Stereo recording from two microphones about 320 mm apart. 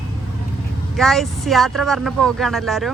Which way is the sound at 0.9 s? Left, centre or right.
Centre.